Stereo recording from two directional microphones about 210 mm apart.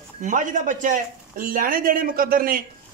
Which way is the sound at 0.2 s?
35° right (ahead or behind).